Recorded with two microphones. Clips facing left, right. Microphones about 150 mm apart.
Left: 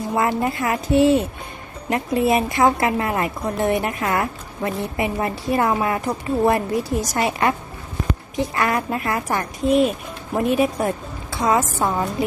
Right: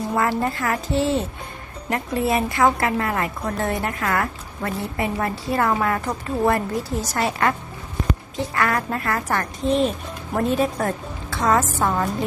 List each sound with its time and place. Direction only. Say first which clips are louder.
0.2 s a woman's voice: left 2 dB; 20° left (ahead or behind)